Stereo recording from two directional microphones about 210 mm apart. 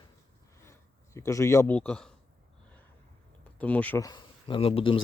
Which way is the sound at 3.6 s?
5° left (ahead or behind).